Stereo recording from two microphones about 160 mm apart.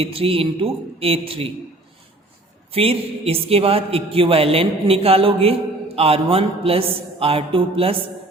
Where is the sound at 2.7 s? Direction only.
40° right (ahead or behind).